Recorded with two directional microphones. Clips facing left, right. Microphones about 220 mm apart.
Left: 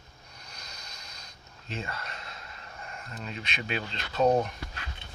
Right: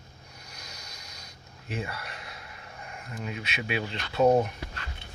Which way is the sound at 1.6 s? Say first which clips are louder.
Right 2 dB; 15° right (ahead or behind).